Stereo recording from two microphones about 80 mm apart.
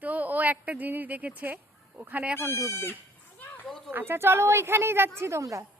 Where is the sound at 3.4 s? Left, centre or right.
Left.